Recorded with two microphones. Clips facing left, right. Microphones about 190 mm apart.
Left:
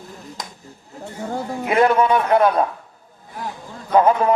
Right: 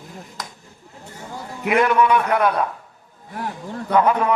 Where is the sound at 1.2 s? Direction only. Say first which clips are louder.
Left 6 dB; 55° left (ahead or behind).